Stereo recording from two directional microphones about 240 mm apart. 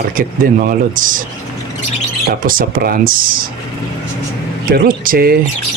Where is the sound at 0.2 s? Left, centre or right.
Right.